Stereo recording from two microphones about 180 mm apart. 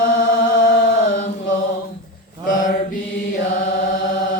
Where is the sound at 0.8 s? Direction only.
45° left (ahead or behind).